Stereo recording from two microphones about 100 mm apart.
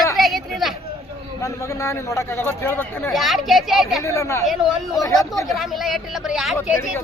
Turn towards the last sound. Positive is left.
turn(degrees=-5)  # may be behind; listen again after turning